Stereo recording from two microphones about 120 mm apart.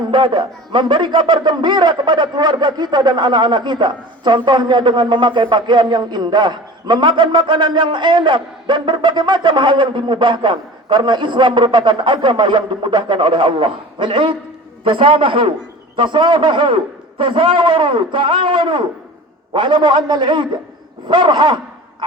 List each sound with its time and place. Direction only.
0.1 s a man's voice: 45° right (ahead or behind)